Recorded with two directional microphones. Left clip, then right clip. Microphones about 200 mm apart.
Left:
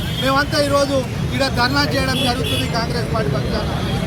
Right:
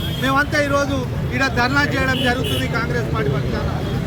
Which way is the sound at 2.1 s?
25° right (ahead or behind).